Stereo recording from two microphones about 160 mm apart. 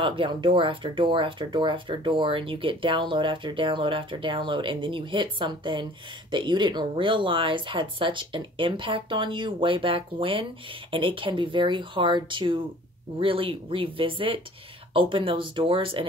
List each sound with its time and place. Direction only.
0.0 s speech: 30° right (ahead or behind)